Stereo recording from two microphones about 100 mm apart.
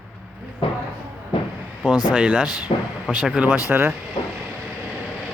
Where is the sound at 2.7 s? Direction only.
90° left.